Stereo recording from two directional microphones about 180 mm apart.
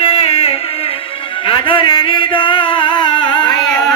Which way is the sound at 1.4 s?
30° left (ahead or behind).